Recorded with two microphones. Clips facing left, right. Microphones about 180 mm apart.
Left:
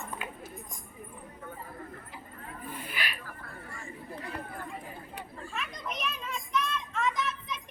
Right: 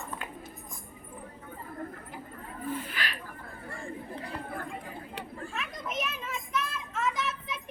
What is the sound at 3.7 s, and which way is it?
Chatter, 60° right (ahead or behind).